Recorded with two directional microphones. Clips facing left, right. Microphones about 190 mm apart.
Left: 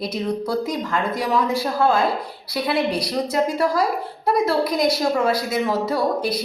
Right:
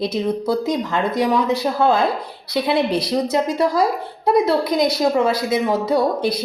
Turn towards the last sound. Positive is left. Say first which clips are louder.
# right 3 dB
turn(degrees=-20)  # may be behind; listen again after turning